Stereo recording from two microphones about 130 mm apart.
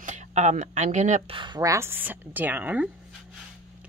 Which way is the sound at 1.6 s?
20° right (ahead or behind).